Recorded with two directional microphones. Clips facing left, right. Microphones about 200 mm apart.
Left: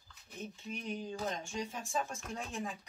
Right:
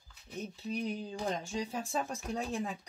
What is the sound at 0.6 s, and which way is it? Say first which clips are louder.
Speech: right 5 dB; 35° right (ahead or behind).